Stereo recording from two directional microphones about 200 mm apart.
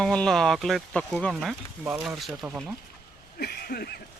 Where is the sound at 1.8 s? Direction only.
10° right (ahead or behind).